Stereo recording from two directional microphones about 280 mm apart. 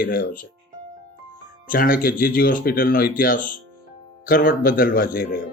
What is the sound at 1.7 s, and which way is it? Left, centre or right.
Speech, left.